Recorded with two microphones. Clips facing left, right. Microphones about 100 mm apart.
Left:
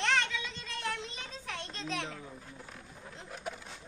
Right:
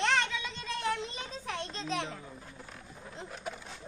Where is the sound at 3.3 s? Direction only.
Centre (ahead or behind).